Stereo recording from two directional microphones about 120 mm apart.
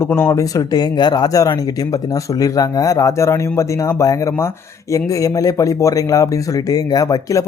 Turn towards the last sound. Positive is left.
turn(degrees=30)  # may be behind; listen again after turning